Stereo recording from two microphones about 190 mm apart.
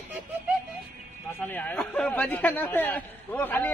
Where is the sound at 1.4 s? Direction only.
10° left (ahead or behind).